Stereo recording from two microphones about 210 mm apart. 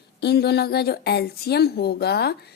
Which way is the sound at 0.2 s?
50° left (ahead or behind).